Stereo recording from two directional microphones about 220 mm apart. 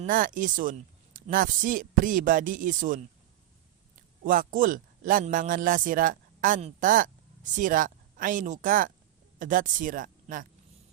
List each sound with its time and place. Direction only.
0.0 s speech: 40° right (ahead or behind)
4.2 s speech: 40° right (ahead or behind)